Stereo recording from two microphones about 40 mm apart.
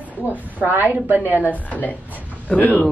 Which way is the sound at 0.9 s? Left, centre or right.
Right.